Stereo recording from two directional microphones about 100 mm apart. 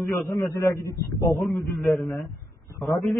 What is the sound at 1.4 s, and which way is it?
Speech, centre (ahead or behind).